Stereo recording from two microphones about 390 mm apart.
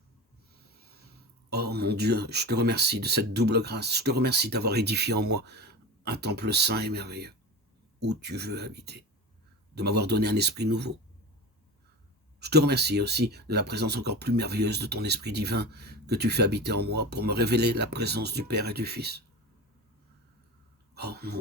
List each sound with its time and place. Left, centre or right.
1.5 s speech: right
12.4 s speech: right
20.9 s speech: right